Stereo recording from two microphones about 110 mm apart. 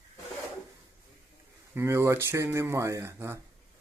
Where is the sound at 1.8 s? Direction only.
25° right (ahead or behind).